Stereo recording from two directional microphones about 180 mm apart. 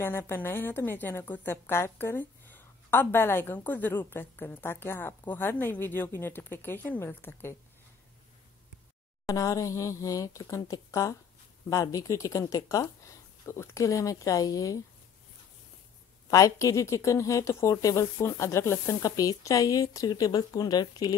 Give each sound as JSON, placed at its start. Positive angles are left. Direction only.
{"t": 0.0, "sound": "a woman's voice", "side_deg": 15}
{"t": 9.2, "sound": "a woman's voice", "side_deg": 20}
{"t": 16.3, "sound": "speech", "side_deg": 20}